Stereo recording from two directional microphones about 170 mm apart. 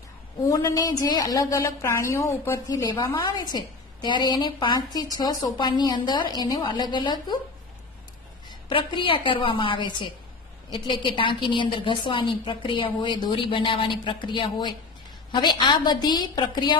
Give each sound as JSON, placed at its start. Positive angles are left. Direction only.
{"t": 0.5, "sound": "a woman's voice", "side_deg": 20}
{"t": 8.5, "sound": "a woman's voice", "side_deg": 30}